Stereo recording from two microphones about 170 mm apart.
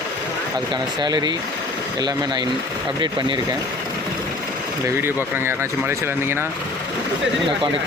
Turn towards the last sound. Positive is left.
turn(degrees=-15)  # may be behind; listen again after turning